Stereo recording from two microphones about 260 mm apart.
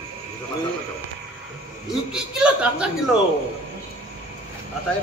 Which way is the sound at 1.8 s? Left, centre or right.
Centre.